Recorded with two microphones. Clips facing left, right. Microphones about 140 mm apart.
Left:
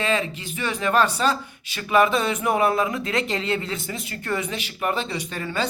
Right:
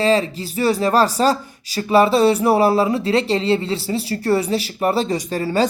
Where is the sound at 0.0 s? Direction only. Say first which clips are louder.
Right 7 dB; 35° right (ahead or behind).